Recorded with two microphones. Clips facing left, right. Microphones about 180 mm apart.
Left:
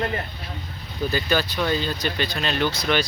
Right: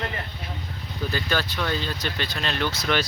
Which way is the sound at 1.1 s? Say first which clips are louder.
Left 3 dB; 10° left (ahead or behind).